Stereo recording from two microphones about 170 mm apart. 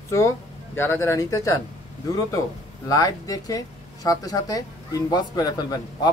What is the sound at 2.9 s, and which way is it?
Speech, 20° left (ahead or behind).